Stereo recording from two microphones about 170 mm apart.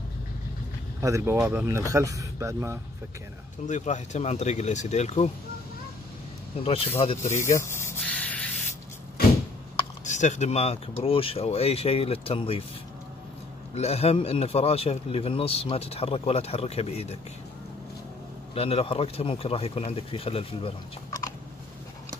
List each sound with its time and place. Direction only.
1.0 s speech: 15° right (ahead or behind)
3.6 s speech: 45° left (ahead or behind)
6.6 s speech: 35° left (ahead or behind)
7.3 s speech: 15° left (ahead or behind)
8.0 s spray: 5° left (ahead or behind)
10.0 s speech: 45° left (ahead or behind)
13.7 s speech: 40° left (ahead or behind)
18.5 s speech: 35° left (ahead or behind)